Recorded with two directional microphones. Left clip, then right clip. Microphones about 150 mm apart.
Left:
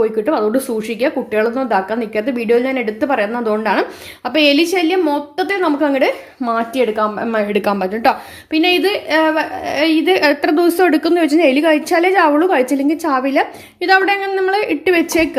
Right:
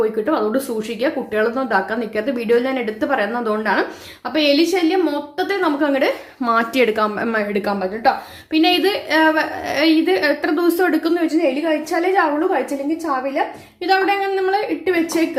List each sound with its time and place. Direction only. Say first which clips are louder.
0.0 s speech: left 3 dB; 35° left (ahead or behind)
6.4 s speech: even; 10° left (ahead or behind)
7.5 s a woman's voice: left 4 dB; 45° left (ahead or behind)
8.5 s speech: left 2 dB; 35° left (ahead or behind)
10.1 s speech: left 4 dB; 45° left (ahead or behind)
11.3 s a woman's voice: left 6 dB; 65° left (ahead or behind)
12.5 s a woman's voice: left 5 dB; 80° left
13.8 s a woman's voice: left 4 dB; 45° left (ahead or behind)
14.6 s a woman's voice: left 4 dB; 55° left (ahead or behind)